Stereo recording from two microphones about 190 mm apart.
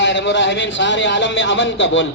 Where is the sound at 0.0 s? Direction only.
70° left (ahead or behind).